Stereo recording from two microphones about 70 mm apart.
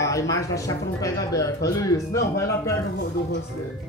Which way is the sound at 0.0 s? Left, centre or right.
Left.